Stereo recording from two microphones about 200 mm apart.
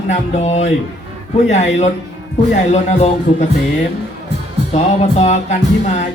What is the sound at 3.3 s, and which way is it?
Music, 30° left (ahead or behind).